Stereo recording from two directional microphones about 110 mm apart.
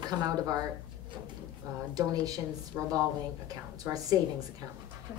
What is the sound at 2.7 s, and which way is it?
A woman's voice, 25° right (ahead or behind).